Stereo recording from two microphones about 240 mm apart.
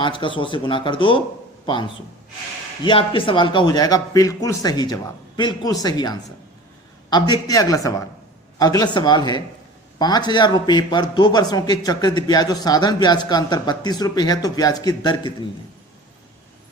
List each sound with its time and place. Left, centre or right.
0.0 s a man's voice: left